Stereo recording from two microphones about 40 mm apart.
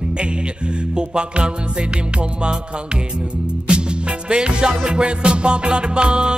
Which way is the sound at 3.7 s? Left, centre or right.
Right.